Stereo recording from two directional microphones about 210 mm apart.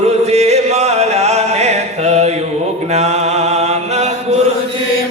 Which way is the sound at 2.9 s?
30° right (ahead or behind).